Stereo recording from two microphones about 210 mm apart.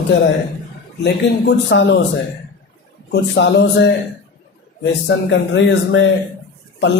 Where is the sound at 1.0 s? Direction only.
55° left (ahead or behind).